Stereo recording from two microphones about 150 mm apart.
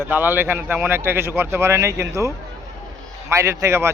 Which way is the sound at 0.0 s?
10° right (ahead or behind).